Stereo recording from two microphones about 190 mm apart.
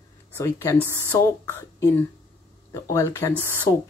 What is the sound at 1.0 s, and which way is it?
Speech, 15° left (ahead or behind).